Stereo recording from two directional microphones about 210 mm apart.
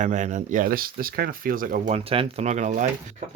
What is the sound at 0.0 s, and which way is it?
Speech, 35° right (ahead or behind).